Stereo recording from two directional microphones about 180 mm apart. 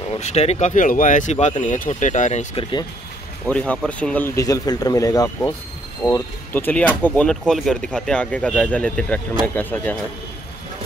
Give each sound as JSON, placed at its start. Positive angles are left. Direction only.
{"t": 0.1, "sound": "speech", "side_deg": 35}
{"t": 3.4, "sound": "speech", "side_deg": 5}
{"t": 4.4, "sound": "speech", "side_deg": 20}